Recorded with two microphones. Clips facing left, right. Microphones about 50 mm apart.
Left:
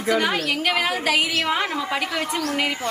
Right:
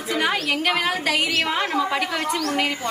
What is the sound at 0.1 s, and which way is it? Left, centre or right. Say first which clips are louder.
A woman's voice: left 1 dB; centre.